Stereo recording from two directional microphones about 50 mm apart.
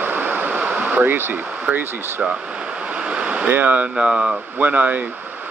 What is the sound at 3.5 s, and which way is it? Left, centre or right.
Speech, right.